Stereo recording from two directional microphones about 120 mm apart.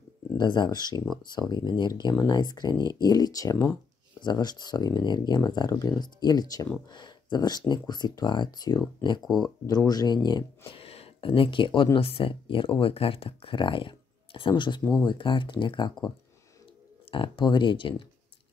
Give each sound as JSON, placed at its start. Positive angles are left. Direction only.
{"t": 0.4, "sound": "speech", "side_deg": 40}
{"t": 10.7, "sound": "speech", "side_deg": 55}
{"t": 14.8, "sound": "speech", "side_deg": 5}
{"t": 15.0, "sound": "speech", "side_deg": 45}
{"t": 17.1, "sound": "speech", "side_deg": 45}